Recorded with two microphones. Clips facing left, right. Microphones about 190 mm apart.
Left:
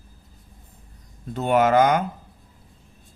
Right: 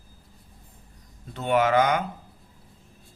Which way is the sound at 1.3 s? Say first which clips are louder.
Left 3 dB; 45° left (ahead or behind).